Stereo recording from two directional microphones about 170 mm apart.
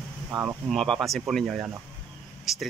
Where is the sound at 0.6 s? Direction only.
Centre (ahead or behind).